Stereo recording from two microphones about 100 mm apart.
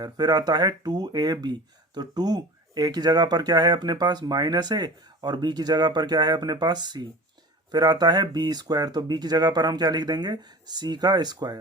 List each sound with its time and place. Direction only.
0.0 s speech: 45° right (ahead or behind)